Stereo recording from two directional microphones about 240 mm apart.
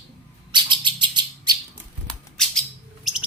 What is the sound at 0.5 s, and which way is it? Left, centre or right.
Bird, centre.